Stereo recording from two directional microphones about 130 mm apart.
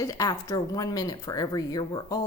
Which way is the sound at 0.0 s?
25° left (ahead or behind).